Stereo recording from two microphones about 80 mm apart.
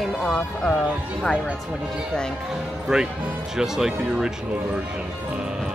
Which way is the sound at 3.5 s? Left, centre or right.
Centre.